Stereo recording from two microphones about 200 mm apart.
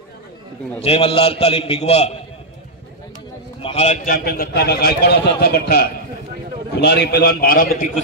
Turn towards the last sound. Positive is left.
turn(degrees=45)  # may be behind; listen again after turning